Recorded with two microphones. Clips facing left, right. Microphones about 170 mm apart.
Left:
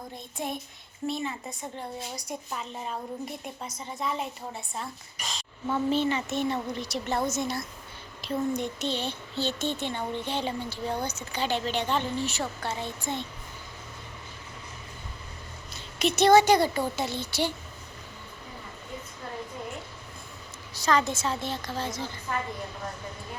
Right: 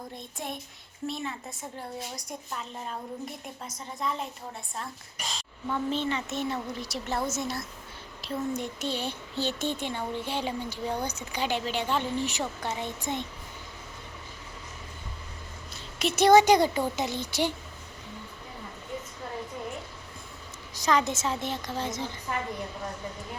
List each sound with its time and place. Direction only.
0.3 s a woman's voice: centre (ahead or behind); by 13.2 s 15° right (ahead or behind)
15.7 s a woman's voice: 5° right (ahead or behind)
20.7 s a woman's voice: 20° right (ahead or behind)